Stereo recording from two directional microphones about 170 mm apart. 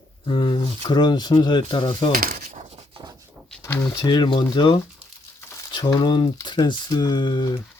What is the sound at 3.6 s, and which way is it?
Speech, 20° left (ahead or behind).